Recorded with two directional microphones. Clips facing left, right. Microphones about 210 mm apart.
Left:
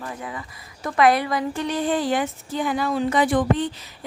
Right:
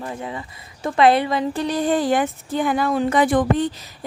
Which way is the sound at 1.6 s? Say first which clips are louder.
Right 3 dB; 40° right (ahead or behind).